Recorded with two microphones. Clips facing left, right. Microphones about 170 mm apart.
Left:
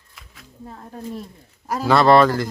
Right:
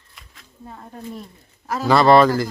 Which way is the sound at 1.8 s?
Centre (ahead or behind).